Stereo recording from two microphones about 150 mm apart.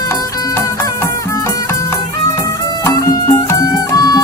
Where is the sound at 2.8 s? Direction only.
20° left (ahead or behind).